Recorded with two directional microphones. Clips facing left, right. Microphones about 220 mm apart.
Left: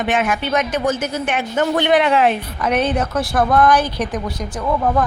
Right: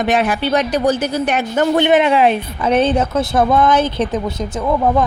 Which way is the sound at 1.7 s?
20° right (ahead or behind).